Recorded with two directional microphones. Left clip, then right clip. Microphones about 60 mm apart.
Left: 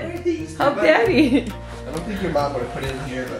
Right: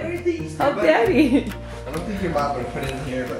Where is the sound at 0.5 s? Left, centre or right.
Centre.